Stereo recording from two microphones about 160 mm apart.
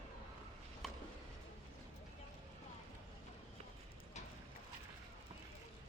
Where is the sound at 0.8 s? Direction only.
Centre (ahead or behind).